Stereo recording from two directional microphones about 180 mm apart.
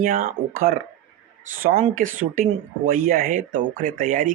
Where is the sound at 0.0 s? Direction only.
50° right (ahead or behind).